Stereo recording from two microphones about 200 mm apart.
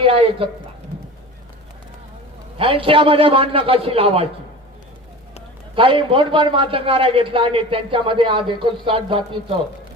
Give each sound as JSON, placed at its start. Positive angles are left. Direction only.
{"t": 0.0, "sound": "a man's voice", "side_deg": -30}
{"t": 2.6, "sound": "a man's voice", "side_deg": -25}
{"t": 5.7, "sound": "a man's voice", "side_deg": -25}